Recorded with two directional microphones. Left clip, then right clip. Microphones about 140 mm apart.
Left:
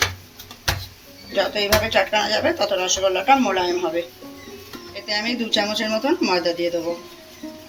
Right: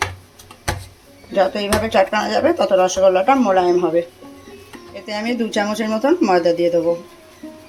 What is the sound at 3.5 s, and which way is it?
Speech, 90° right.